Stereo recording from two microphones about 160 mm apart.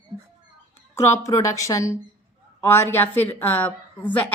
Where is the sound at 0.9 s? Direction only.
20° left (ahead or behind).